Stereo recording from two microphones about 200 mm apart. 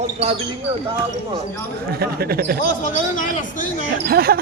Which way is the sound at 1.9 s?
50° right (ahead or behind).